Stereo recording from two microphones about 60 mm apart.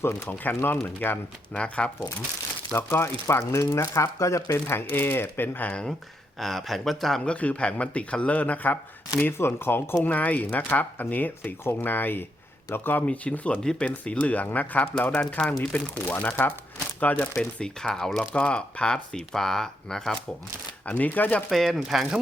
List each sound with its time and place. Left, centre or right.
0.0 s speech: left
1.5 s a man's voice: centre
2.7 s speech: left
4.7 s speech: left
6.4 s speech: centre
7.3 s a man's voice: left
9.2 s a man's voice: left
13.1 s a man's voice: left
15.7 s a man's voice: left
17.3 s speech: centre
18.2 s speech: centre
20.8 s a man's voice: left
21.5 s speech: centre